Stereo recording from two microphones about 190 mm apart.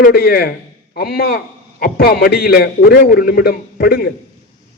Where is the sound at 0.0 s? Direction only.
55° left (ahead or behind).